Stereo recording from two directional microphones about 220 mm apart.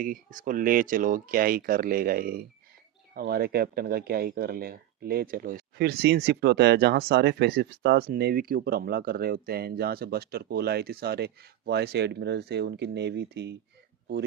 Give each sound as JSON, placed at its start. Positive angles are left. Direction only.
{"t": 0.0, "sound": "speech", "side_deg": -40}